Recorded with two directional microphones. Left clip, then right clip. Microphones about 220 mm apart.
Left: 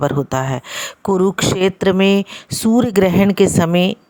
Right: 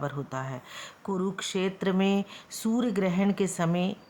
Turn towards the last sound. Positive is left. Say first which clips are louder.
# left 14 dB
turn(degrees=40)  # may be behind; listen again after turning